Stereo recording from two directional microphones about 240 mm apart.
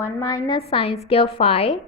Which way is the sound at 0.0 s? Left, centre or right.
Centre.